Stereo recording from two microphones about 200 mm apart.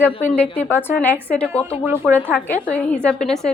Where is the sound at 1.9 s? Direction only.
10° right (ahead or behind).